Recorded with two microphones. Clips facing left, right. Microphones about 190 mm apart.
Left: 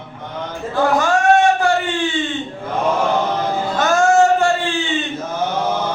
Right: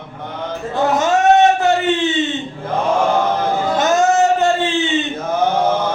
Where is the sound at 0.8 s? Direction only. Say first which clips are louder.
Right 1 dB; 20° right (ahead or behind).